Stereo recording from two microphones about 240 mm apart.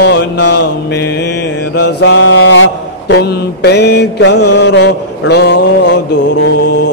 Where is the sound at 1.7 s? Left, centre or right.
Left.